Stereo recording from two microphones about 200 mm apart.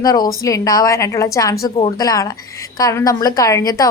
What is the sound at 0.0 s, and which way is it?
Speech, 20° left (ahead or behind).